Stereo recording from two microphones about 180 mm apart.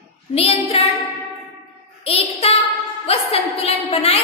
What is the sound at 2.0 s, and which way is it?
A woman's voice, 35° left (ahead or behind).